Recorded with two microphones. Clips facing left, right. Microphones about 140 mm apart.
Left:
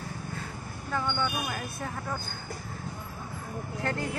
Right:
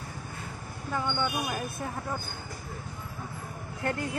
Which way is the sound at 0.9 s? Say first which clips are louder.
Even; 15° right (ahead or behind).